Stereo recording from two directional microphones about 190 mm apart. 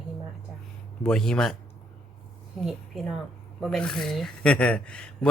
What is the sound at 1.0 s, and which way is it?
Speech, 5° left (ahead or behind).